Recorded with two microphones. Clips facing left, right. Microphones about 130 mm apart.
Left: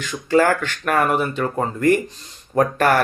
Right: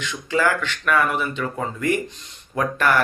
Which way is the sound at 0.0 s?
45° left (ahead or behind).